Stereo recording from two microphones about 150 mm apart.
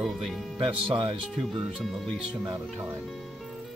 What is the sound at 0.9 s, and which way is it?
Speech, 35° right (ahead or behind).